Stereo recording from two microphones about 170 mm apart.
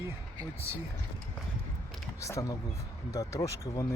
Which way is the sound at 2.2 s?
20° left (ahead or behind).